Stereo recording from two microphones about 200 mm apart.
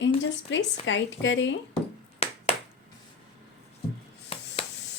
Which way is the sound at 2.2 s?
30° left (ahead or behind).